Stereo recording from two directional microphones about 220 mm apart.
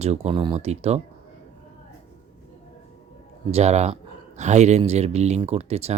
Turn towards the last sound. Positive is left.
turn(degrees=-30)  # may be behind; listen again after turning